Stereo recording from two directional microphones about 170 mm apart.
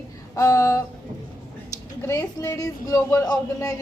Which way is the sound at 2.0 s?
20° left (ahead or behind).